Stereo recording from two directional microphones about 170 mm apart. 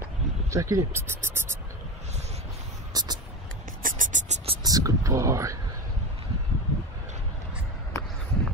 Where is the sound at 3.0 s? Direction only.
20° right (ahead or behind).